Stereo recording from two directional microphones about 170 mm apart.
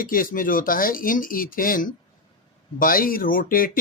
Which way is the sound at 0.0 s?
55° left (ahead or behind).